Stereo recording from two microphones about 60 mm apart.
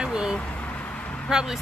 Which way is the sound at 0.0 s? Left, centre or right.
Centre.